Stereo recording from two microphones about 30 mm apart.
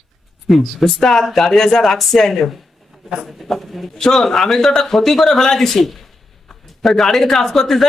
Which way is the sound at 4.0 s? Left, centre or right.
Centre.